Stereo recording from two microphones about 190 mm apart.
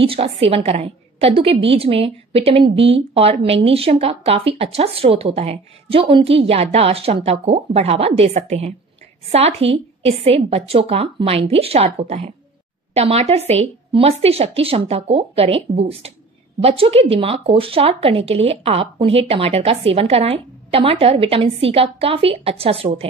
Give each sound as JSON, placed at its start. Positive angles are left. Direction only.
{"t": 0.0, "sound": "speech", "side_deg": -30}